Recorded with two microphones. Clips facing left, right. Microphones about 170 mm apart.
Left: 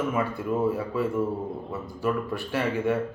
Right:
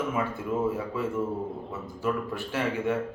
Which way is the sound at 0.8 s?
20° right (ahead or behind).